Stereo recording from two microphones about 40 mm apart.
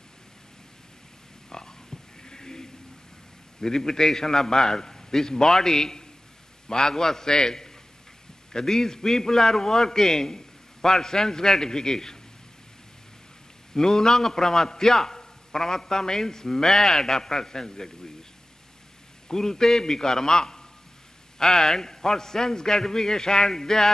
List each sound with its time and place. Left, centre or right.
1.5 s a sound: centre
3.6 s a man's voice: centre
13.7 s a man's voice: centre
19.2 s a man's voice: centre